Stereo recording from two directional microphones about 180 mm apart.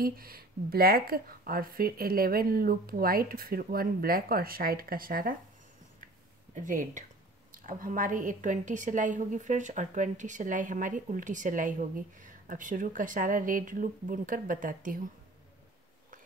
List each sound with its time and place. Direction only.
0.0 s a woman's voice: 55° right (ahead or behind)
6.5 s a woman's voice: 45° right (ahead or behind)